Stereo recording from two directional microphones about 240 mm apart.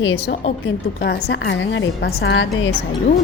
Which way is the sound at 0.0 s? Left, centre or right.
Left.